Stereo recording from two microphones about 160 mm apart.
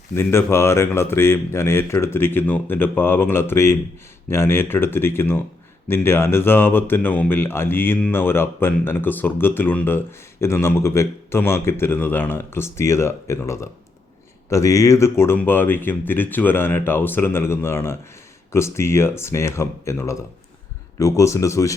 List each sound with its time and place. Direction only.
0.2 s speech: 15° left (ahead or behind)